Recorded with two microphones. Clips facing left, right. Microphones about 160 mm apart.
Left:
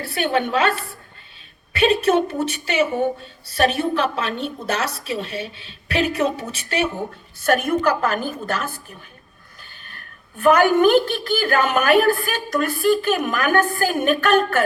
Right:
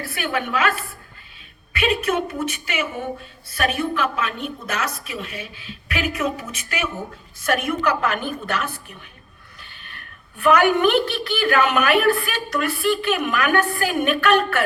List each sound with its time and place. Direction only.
0.0 s a woman's voice: 30° left (ahead or behind)